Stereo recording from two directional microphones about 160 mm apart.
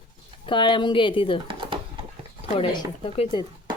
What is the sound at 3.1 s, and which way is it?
Speech, 30° left (ahead or behind).